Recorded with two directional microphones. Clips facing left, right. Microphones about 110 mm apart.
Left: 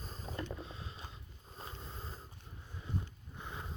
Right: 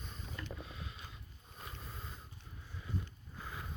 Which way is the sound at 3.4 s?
25° left (ahead or behind).